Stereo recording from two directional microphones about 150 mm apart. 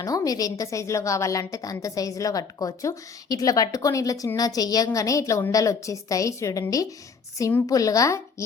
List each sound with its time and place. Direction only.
0.0 s a woman's voice: 25° left (ahead or behind)